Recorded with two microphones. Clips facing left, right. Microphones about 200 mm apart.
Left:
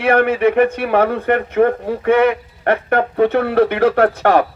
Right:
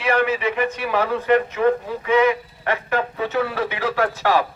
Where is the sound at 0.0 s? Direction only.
55° left (ahead or behind).